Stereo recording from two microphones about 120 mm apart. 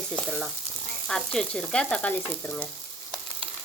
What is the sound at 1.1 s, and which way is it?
Frying, 5° left (ahead or behind).